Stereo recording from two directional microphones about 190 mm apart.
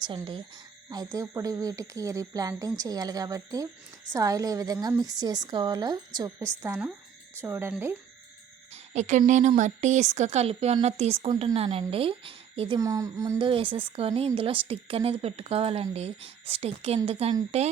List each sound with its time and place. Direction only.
0.0 s speech: 25° right (ahead or behind)
8.7 s a woman's voice: 35° right (ahead or behind); by 13.5 s 15° right (ahead or behind)
13.5 s a woman's voice: 30° right (ahead or behind)